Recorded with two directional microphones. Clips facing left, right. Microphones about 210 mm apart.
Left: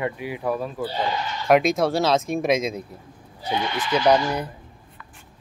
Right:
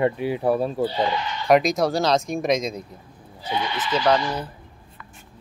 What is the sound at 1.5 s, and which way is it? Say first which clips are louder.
Speech: even; centre (ahead or behind).